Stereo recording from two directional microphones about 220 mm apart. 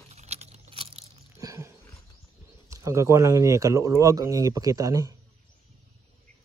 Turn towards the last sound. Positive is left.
turn(degrees=-15)  # may be behind; listen again after turning